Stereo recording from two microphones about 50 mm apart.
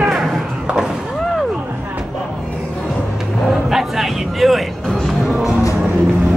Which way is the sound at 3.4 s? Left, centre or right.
Centre.